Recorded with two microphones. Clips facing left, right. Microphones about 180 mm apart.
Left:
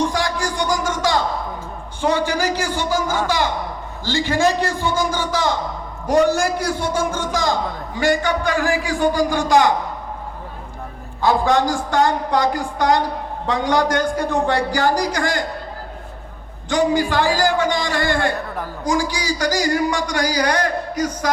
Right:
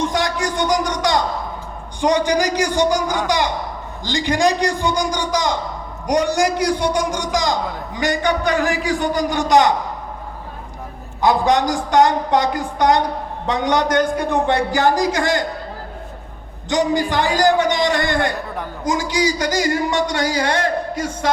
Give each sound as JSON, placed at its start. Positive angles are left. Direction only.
{"t": 0.0, "sound": "music", "side_deg": -20}
{"t": 2.0, "sound": "a man's voice", "side_deg": -15}
{"t": 11.2, "sound": "a man's voice", "side_deg": -20}
{"t": 16.6, "sound": "a man's voice", "side_deg": -20}